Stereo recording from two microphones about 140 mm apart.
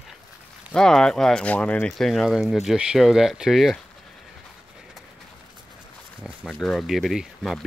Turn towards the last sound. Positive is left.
turn(degrees=0)  # may be behind; listen again after turning